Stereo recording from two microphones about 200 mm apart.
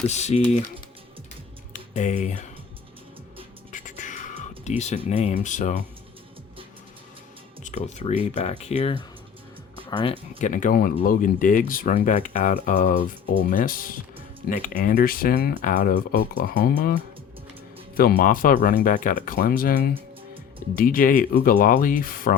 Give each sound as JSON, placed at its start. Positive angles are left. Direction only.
{"t": 0.1, "sound": "speech", "side_deg": 35}
{"t": 1.7, "sound": "speech", "side_deg": 35}
{"t": 3.7, "sound": "music", "side_deg": 40}
{"t": 5.0, "sound": "speech", "side_deg": 35}
{"t": 7.6, "sound": "speech", "side_deg": 35}
{"t": 10.3, "sound": "speech", "side_deg": 40}
{"t": 17.9, "sound": "speech", "side_deg": 45}